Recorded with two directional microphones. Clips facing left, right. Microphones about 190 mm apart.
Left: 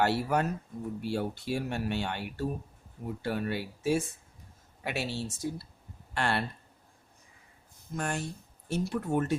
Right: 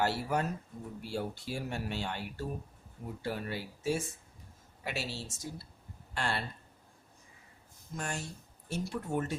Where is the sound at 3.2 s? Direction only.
65° left (ahead or behind).